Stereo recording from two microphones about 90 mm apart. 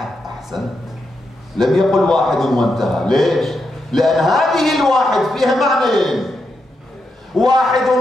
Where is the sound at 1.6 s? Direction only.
Centre (ahead or behind).